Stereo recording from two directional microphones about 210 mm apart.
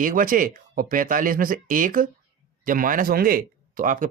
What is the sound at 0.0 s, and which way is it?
Speech, 40° right (ahead or behind).